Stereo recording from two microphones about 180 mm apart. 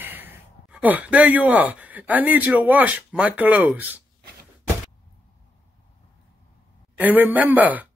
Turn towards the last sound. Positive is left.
turn(degrees=-10)  # may be behind; listen again after turning